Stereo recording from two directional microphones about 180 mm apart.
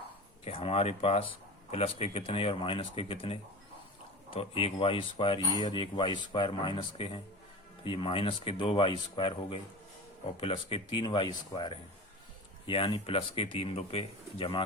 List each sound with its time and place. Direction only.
0.4 s speech: 35° left (ahead or behind)